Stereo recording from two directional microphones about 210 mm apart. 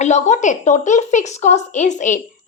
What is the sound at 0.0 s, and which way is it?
A woman's voice, 35° left (ahead or behind).